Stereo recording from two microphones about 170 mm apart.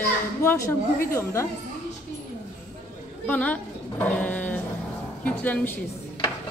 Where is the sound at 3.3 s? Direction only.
10° left (ahead or behind).